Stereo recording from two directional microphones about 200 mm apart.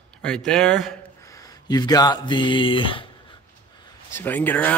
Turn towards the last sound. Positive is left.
turn(degrees=10)  # may be behind; listen again after turning